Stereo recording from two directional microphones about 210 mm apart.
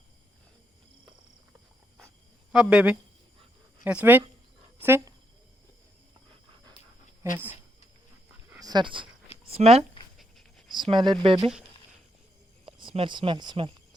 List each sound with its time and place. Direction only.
2.5 s speech: 5° right (ahead or behind)
8.4 s dog: 15° right (ahead or behind)
9.5 s speech: 30° right (ahead or behind)
12.6 s speech: 25° right (ahead or behind)